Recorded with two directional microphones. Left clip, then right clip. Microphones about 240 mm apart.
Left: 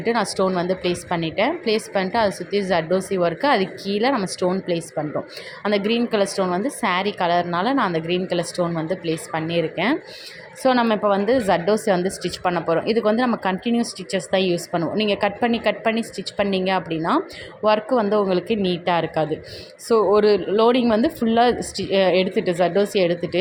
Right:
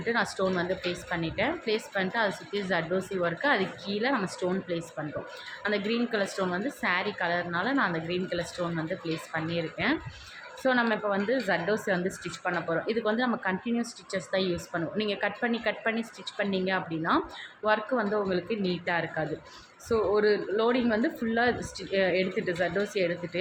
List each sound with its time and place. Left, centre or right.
0.0 s a woman's voice: left